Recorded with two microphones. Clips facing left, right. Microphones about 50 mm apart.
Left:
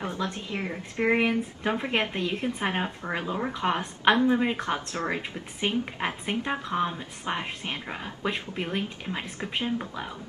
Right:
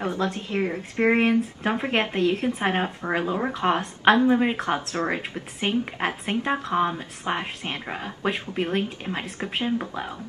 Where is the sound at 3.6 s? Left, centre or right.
Centre.